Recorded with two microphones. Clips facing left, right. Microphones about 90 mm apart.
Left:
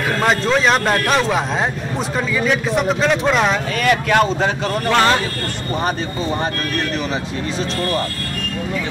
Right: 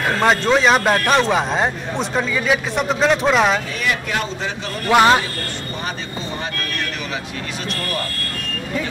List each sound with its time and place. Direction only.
0.2 s a man's voice: centre (ahead or behind)
3.8 s speech: 60° left (ahead or behind)
4.9 s speech: 10° right (ahead or behind)